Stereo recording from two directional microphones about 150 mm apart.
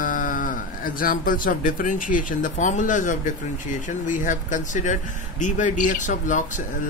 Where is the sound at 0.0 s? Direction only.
65° left (ahead or behind).